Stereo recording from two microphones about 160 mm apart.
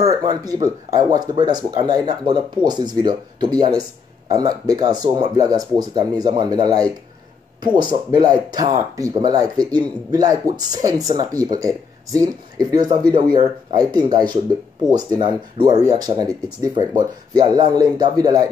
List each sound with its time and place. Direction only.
0.0 s speech: 25° right (ahead or behind)
7.9 s speech: 25° right (ahead or behind)